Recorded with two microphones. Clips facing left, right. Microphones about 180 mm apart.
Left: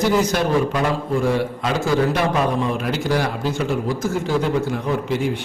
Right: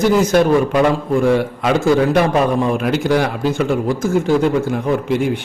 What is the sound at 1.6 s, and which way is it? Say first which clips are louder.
A man's voice: right 5 dB; 65° right (ahead or behind).